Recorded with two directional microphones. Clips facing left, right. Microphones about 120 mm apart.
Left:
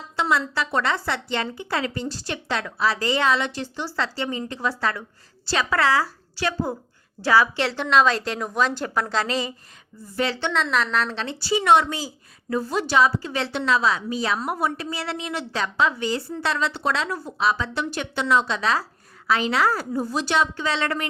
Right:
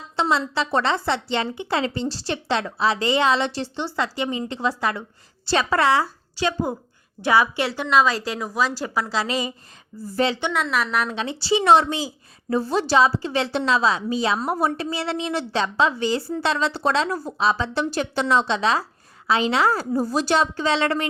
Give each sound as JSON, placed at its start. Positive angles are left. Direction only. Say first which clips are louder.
{"t": 0.2, "sound": "a woman's voice", "louder": "right 1 dB", "side_deg": -25}
{"t": 11.4, "sound": "a woman's voice", "louder": "right 2 dB", "side_deg": -30}